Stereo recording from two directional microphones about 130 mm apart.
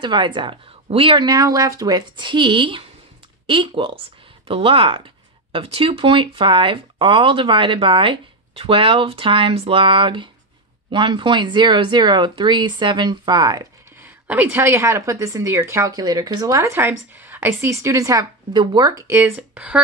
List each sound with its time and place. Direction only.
0.0 s speech: 35° right (ahead or behind)
1.2 s speech: 25° right (ahead or behind)
14.0 s a woman's voice: 15° right (ahead or behind)